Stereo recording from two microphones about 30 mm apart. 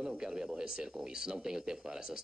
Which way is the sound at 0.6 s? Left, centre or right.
Right.